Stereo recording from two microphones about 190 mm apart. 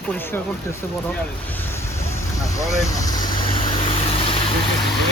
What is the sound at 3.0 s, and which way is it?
Vehicle, 20° left (ahead or behind).